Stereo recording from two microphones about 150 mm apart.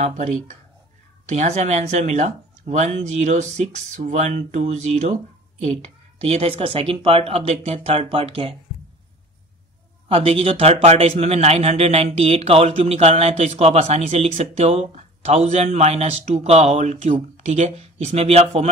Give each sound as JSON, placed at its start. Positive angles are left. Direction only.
{"t": 0.0, "sound": "a man's voice", "side_deg": -50}
{"t": 6.2, "sound": "speech", "side_deg": -40}
{"t": 10.0, "sound": "a man's voice", "side_deg": -40}